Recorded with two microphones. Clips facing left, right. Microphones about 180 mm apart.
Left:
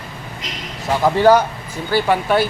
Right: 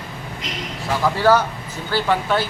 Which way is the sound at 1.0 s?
20° left (ahead or behind).